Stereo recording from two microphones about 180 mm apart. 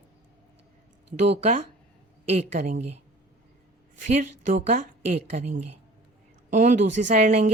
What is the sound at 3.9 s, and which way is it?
A woman's voice, 45° right (ahead or behind).